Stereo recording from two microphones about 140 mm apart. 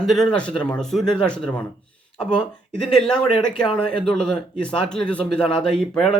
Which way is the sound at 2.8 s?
5° left (ahead or behind).